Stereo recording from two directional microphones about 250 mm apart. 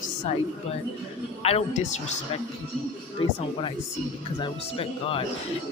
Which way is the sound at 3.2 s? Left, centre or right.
Left.